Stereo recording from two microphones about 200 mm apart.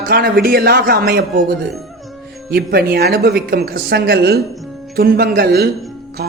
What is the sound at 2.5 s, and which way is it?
A man's voice, 50° right (ahead or behind).